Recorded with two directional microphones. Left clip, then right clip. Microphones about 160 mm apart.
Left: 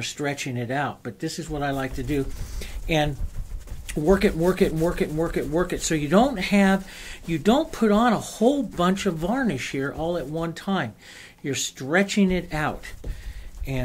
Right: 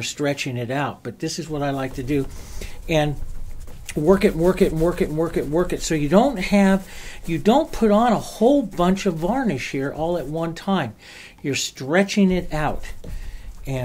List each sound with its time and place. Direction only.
0.0 s speech: 25° right (ahead or behind)